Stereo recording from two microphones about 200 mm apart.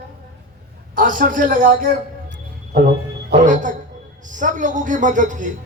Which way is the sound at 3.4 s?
40° right (ahead or behind).